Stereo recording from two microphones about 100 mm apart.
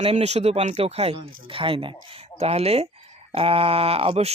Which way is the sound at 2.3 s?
90° right.